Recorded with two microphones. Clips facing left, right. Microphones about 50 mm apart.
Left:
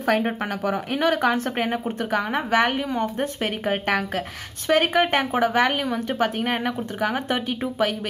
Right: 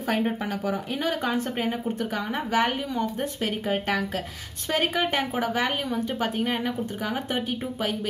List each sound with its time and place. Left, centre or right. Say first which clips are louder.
0.0 s speech: left 4 dB; left